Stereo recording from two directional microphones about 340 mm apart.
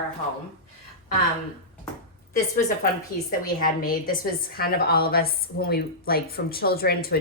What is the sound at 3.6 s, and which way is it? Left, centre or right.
A woman's voice, left.